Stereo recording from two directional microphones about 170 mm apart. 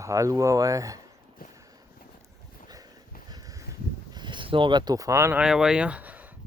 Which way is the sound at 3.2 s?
20° right (ahead or behind).